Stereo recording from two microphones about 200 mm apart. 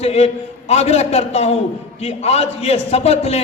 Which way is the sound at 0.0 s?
30° left (ahead or behind).